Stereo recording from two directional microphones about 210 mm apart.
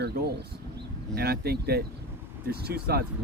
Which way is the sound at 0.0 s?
50° right (ahead or behind).